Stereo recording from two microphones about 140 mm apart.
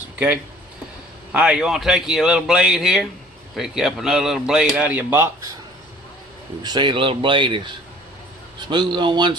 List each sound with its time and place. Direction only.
1.3 s speech: 5° right (ahead or behind)
6.6 s speech: 30° right (ahead or behind)